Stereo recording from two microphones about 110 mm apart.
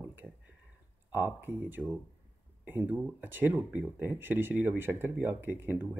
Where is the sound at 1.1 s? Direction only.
20° right (ahead or behind).